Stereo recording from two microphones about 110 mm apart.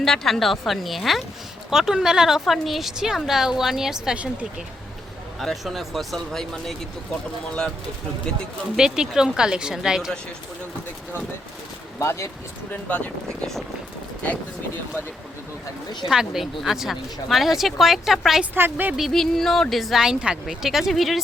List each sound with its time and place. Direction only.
0.0 s a woman's voice: 5° left (ahead or behind)
5.4 s a woman's voice: centre (ahead or behind)
8.7 s a woman's voice: 5° right (ahead or behind)
11.9 s speech: 25° left (ahead or behind)
16.0 s a woman's voice: 5° right (ahead or behind)
18.5 s speech: 20° right (ahead or behind)
18.9 s a woman's voice: centre (ahead or behind)